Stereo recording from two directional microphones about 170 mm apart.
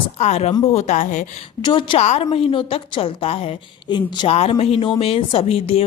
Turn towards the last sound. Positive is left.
turn(degrees=35)  # may be behind; listen again after turning